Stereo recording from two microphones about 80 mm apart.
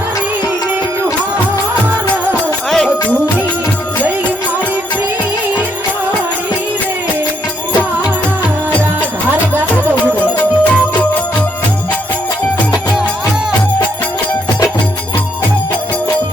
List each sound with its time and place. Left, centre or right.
2.6 s music: centre
10.2 s music: centre